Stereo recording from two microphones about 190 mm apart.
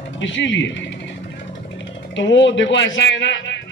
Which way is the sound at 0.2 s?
75° left (ahead or behind).